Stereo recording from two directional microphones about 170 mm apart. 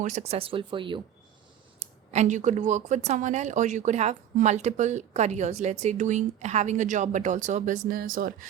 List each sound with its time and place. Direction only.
0.0 s speech: 45° right (ahead or behind)
1.8 s speech: 45° right (ahead or behind)